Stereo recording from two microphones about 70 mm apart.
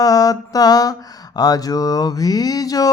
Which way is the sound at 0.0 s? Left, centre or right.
Left.